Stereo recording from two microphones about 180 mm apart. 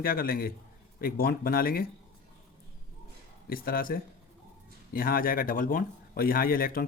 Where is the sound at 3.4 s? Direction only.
55° left (ahead or behind).